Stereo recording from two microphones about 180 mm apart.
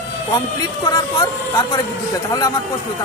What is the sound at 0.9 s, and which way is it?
Speech, 25° left (ahead or behind).